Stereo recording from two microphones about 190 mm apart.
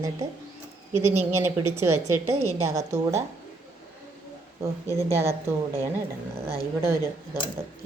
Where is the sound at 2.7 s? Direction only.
15° right (ahead or behind).